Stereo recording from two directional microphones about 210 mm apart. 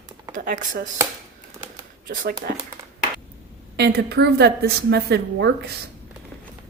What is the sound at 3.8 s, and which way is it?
A woman's voice, 50° right (ahead or behind).